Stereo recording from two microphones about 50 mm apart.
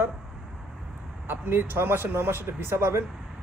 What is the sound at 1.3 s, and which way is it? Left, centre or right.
Speech, right.